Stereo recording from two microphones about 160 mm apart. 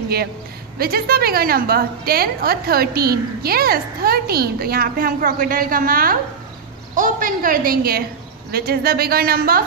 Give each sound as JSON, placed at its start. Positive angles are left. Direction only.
{"t": 0.7, "sound": "a woman's voice", "side_deg": -70}